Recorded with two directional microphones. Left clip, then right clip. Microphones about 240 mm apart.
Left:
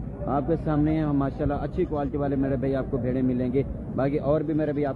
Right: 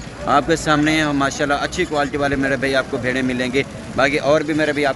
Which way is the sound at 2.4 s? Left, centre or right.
Centre.